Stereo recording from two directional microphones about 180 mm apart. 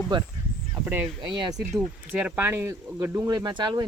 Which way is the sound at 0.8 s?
10° right (ahead or behind).